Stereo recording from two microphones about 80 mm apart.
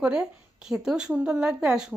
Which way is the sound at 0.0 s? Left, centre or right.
Centre.